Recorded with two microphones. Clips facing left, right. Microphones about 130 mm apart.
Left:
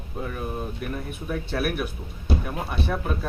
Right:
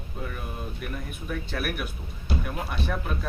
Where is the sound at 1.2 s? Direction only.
35° left (ahead or behind).